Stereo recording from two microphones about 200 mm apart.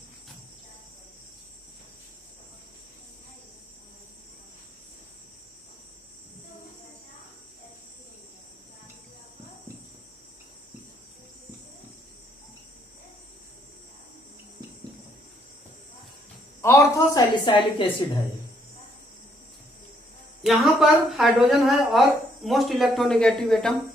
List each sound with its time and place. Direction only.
16.6 s a woman's voice: 15° left (ahead or behind)
20.4 s a woman's voice: centre (ahead or behind)